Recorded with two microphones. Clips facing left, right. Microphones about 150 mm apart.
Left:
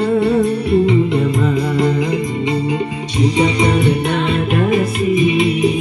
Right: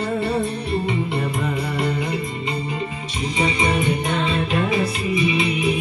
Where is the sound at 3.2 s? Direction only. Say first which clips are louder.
Left 7 dB; 70° left (ahead or behind); by 5.6 s 45° left (ahead or behind).